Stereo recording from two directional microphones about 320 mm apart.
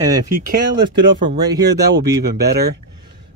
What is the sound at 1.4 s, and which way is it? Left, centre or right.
Speech, centre.